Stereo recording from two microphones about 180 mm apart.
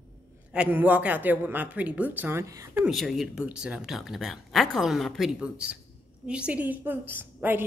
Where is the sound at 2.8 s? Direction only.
Centre (ahead or behind).